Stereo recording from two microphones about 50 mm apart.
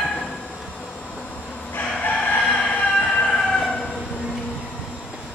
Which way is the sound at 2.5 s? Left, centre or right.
Left.